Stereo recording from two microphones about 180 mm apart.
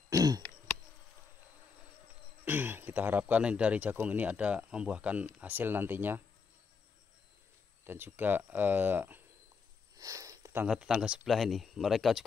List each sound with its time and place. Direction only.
0.1 s throat clearing: 20° right (ahead or behind)
2.4 s speech: 10° right (ahead or behind)
7.8 s speech: 10° right (ahead or behind)
9.9 s a sound: 20° right (ahead or behind)
10.7 s speech: 5° right (ahead or behind)